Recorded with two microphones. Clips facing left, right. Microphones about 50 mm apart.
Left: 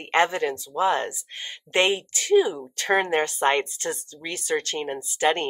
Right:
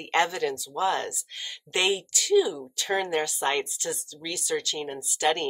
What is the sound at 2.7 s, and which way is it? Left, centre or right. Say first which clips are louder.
Speech: left 6 dB; left.